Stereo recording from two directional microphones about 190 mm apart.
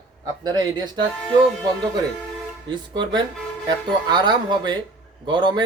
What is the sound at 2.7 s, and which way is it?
Speech, 25° right (ahead or behind).